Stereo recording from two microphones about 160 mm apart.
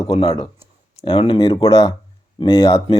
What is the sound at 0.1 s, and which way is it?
Speech, 35° left (ahead or behind).